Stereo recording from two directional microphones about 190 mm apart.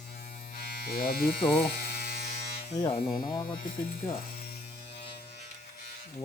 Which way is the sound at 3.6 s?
45° left (ahead or behind).